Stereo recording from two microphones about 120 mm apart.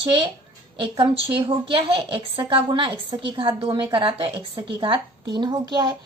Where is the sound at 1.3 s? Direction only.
45° right (ahead or behind).